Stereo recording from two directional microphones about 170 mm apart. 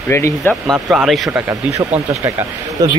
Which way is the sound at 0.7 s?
Centre (ahead or behind).